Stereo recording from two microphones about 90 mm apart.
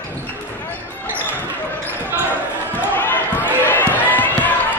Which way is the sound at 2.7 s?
20° left (ahead or behind).